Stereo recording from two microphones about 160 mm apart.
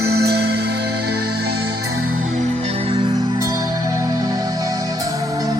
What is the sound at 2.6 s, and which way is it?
Music, 40° right (ahead or behind).